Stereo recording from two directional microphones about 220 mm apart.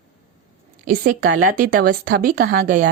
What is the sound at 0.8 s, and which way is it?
A woman's voice, 35° right (ahead or behind).